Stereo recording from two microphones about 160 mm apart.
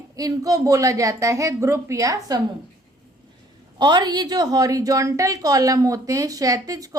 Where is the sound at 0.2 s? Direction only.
20° right (ahead or behind).